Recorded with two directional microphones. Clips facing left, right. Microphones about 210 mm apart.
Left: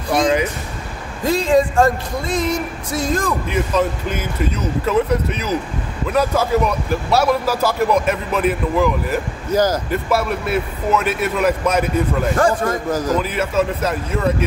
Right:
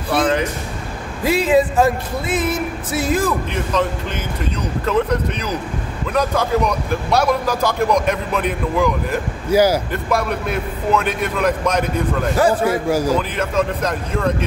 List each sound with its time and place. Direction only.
1.2 s speech: 5° right (ahead or behind)
3.4 s speech: 5° left (ahead or behind)
9.5 s a man's voice: 10° right (ahead or behind)
9.8 s speech: 5° left (ahead or behind)
12.4 s a man's voice: 10° right (ahead or behind)
13.2 s speech: 5° left (ahead or behind)